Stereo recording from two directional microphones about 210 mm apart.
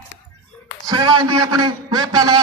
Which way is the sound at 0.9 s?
20° right (ahead or behind).